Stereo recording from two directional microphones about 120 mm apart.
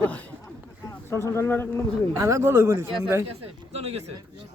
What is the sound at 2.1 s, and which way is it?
Speech, 25° right (ahead or behind).